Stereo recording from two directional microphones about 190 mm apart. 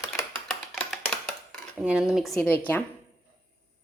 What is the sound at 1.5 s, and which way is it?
Speech, 5° right (ahead or behind).